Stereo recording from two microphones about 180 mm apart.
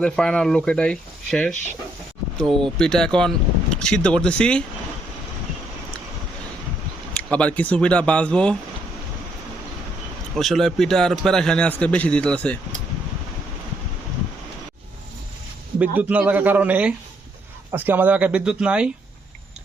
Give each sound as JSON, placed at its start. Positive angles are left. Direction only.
{"t": 0.0, "sound": "a man's voice", "side_deg": 5}
{"t": 2.5, "sound": "speech", "side_deg": -30}
{"t": 2.7, "sound": "a man's voice", "side_deg": 5}
{"t": 7.2, "sound": "speech", "side_deg": 5}
{"t": 10.3, "sound": "a man's voice", "side_deg": 0}
{"t": 15.8, "sound": "speech", "side_deg": -10}